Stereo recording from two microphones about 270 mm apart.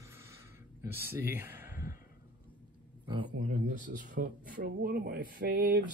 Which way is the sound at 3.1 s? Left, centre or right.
Right.